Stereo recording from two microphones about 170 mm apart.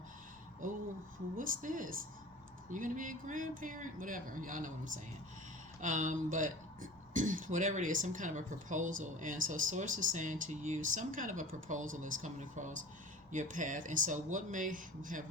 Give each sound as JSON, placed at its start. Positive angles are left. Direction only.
{"t": 1.4, "sound": "speech", "side_deg": -50}
{"t": 5.8, "sound": "speech", "side_deg": -45}